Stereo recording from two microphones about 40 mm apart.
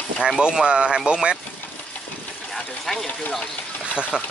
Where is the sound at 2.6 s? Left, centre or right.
Centre.